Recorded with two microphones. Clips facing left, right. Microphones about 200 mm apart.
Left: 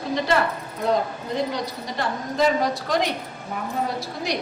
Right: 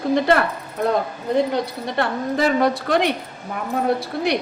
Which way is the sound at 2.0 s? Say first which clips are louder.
Right 3 dB; 65° right (ahead or behind).